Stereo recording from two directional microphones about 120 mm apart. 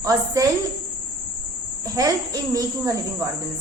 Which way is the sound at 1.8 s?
30° right (ahead or behind).